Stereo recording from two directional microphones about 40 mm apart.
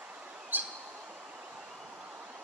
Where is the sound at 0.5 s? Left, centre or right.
Right.